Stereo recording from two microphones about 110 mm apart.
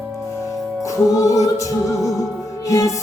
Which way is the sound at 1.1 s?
30° left (ahead or behind).